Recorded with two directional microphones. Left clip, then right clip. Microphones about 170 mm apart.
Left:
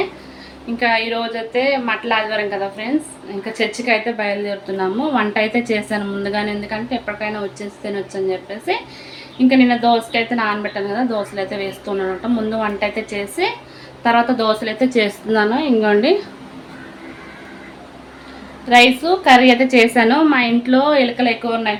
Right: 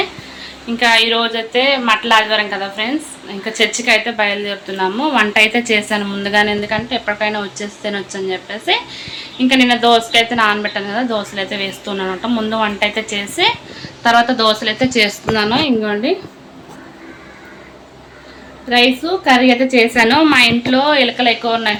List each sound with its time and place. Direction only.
1.0 s a woman's voice: centre (ahead or behind)
18.7 s a woman's voice: 25° left (ahead or behind); by 21.7 s 5° left (ahead or behind)